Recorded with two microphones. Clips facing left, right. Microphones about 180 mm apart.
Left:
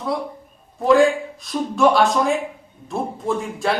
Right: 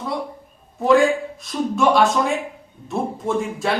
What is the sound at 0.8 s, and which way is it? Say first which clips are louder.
A man's voice: left 1 dB; centre (ahead or behind).